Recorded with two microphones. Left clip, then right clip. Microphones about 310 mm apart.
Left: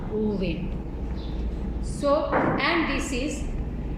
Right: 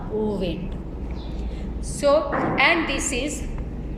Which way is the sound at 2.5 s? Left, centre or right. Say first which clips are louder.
Right 5 dB; right.